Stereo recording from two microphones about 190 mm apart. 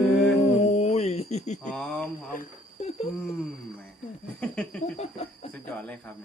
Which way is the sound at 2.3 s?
40° left (ahead or behind).